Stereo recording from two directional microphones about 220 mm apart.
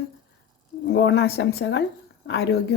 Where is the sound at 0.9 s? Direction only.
55° left (ahead or behind).